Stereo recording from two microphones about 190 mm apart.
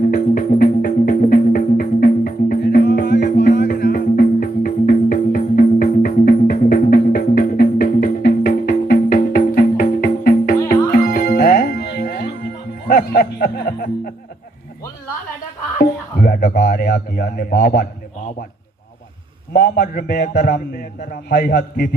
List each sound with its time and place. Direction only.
0.1 s music: 45° left (ahead or behind)
15.8 s music: 55° left (ahead or behind)
19.5 s a man's voice: 55° left (ahead or behind)